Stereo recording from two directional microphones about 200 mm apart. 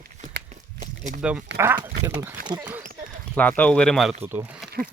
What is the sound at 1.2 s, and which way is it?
Speech, 5° right (ahead or behind).